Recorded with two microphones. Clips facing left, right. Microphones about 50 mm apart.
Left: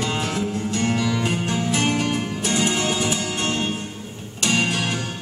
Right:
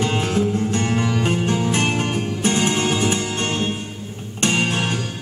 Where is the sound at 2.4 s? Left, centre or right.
Right.